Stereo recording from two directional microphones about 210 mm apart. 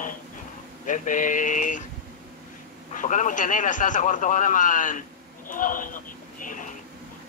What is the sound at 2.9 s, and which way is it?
A man's voice, 35° left (ahead or behind).